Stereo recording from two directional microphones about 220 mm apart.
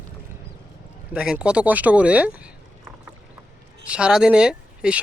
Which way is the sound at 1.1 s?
5° right (ahead or behind).